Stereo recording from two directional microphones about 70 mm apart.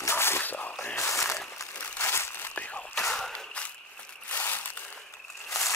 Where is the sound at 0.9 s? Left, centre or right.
Left.